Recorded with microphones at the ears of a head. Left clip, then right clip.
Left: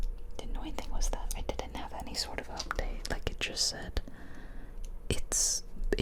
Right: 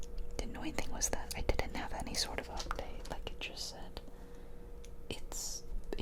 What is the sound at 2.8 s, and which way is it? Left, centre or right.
Whispering, left.